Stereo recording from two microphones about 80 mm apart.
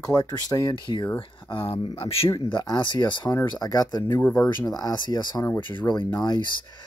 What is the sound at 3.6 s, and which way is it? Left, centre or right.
Speech, left.